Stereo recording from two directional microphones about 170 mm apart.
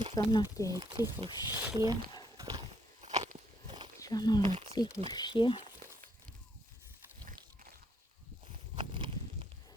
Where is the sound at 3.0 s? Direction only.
45° right (ahead or behind).